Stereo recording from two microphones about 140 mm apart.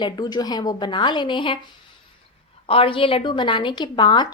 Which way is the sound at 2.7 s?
40° left (ahead or behind).